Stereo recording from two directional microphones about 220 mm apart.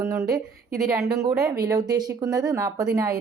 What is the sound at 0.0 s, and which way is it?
Speech, 10° right (ahead or behind).